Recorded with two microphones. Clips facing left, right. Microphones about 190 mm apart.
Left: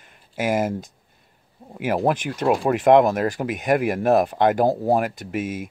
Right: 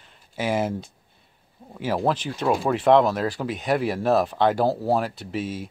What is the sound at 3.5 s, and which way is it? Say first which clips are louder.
Speech: left 3 dB; 50° left (ahead or behind).